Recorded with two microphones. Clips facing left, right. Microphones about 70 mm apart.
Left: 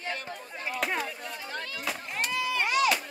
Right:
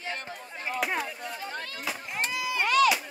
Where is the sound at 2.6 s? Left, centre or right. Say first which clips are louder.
Right 5 dB; right.